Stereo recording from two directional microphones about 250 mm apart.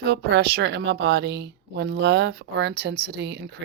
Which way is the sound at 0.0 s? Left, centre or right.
Right.